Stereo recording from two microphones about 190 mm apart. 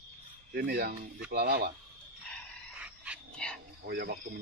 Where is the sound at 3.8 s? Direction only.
55° right (ahead or behind).